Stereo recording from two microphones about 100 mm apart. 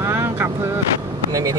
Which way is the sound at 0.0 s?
25° right (ahead or behind).